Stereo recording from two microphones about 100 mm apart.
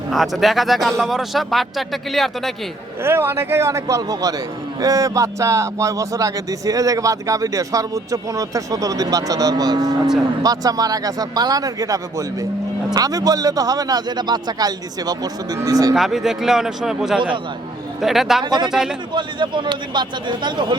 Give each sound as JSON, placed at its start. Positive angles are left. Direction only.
{"t": 0.1, "sound": "a man's voice", "side_deg": 0}
{"t": 3.0, "sound": "a man's voice", "side_deg": -25}
{"t": 16.0, "sound": "a man's voice", "side_deg": -5}
{"t": 18.4, "sound": "speech", "side_deg": -45}
{"t": 18.7, "sound": "a man's voice", "side_deg": -5}
{"t": 19.1, "sound": "speech", "side_deg": -50}